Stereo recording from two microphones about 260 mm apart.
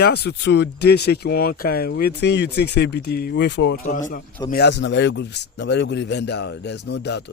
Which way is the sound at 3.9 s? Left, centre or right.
Left.